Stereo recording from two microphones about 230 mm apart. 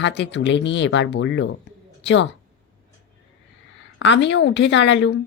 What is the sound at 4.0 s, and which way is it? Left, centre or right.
A woman's voice, left.